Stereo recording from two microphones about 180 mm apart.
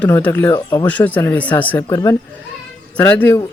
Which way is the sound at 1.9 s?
20° left (ahead or behind).